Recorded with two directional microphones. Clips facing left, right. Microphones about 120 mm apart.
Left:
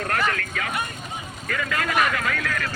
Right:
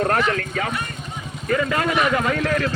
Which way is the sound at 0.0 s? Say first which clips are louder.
Right 5 dB; 30° right (ahead or behind).